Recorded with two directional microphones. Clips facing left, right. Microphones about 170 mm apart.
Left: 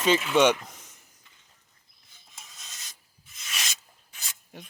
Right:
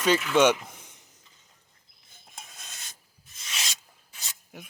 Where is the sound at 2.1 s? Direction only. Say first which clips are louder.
Right 4 dB; 55° right (ahead or behind).